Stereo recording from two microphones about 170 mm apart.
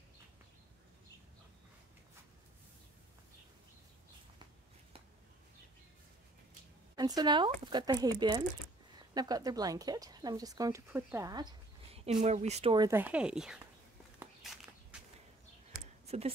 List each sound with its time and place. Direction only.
7.0 s a woman's voice: 25° right (ahead or behind)
12.0 s speech: 40° right (ahead or behind)
12.7 s speech: 15° right (ahead or behind)
14.4 s walk: centre (ahead or behind)